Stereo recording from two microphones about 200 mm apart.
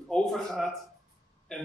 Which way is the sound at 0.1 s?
5° left (ahead or behind).